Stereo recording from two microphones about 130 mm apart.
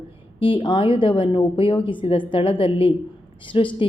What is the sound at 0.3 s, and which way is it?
Speech, 40° left (ahead or behind).